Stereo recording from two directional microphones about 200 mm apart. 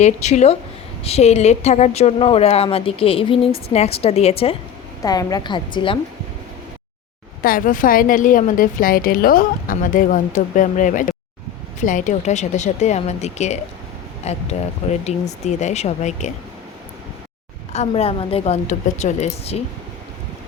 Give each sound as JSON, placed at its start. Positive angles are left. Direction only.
{"t": 0.0, "sound": "a woman's voice", "side_deg": 35}
{"t": 5.0, "sound": "a woman's voice", "side_deg": 20}
{"t": 7.4, "sound": "a woman's voice", "side_deg": 45}
{"t": 17.7, "sound": "speech", "side_deg": 30}